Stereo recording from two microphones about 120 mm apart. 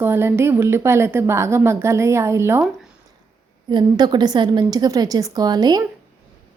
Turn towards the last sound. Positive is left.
turn(degrees=-35)  # may be behind; listen again after turning